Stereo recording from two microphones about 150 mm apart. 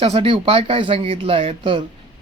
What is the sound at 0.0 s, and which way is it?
Speech, 40° right (ahead or behind).